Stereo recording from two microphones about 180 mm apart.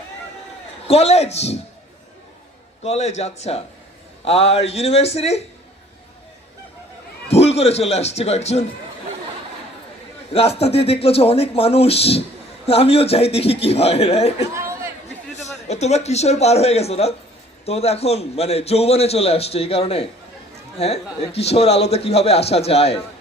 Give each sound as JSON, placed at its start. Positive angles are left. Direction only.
{"t": 0.9, "sound": "a man's voice", "side_deg": 35}
{"t": 2.8, "sound": "a man's voice", "side_deg": 35}
{"t": 7.3, "sound": "speech", "side_deg": 35}
{"t": 10.3, "sound": "a man's voice", "side_deg": 35}
{"t": 14.5, "sound": "chatter", "side_deg": -15}
{"t": 15.4, "sound": "a man's voice", "side_deg": 40}